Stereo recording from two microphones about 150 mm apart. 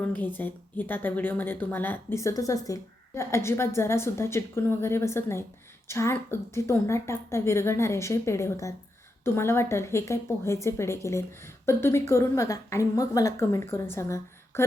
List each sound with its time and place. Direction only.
0.0 s a woman's voice: 10° left (ahead or behind)